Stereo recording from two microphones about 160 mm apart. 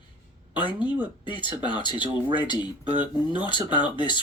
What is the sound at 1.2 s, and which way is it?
Speech, 30° left (ahead or behind).